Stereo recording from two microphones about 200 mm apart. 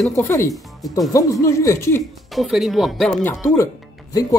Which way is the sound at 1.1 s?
15° left (ahead or behind).